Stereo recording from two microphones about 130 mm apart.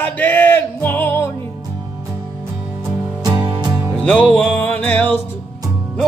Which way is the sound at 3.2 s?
35° right (ahead or behind).